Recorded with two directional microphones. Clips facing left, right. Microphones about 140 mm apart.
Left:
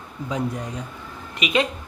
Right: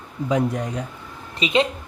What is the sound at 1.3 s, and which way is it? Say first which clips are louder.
Speech: right 2 dB; 30° right (ahead or behind).